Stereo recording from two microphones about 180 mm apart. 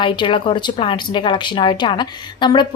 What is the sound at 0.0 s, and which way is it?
Speech, 25° left (ahead or behind).